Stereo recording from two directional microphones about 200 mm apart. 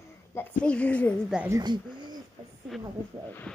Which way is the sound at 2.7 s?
Centre (ahead or behind).